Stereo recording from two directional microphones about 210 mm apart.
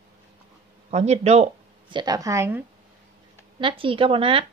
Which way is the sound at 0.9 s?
30° right (ahead or behind).